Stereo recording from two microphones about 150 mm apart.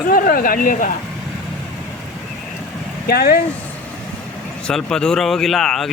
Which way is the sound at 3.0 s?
90° left.